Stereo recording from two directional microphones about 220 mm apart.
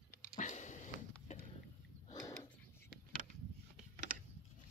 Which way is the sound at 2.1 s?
15° left (ahead or behind).